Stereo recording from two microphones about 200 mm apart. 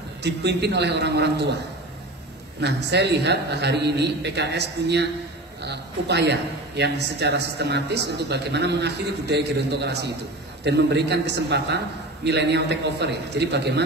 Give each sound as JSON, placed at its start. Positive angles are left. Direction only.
{"t": 0.2, "sound": "a man's voice", "side_deg": -55}
{"t": 2.6, "sound": "a man's voice", "side_deg": -55}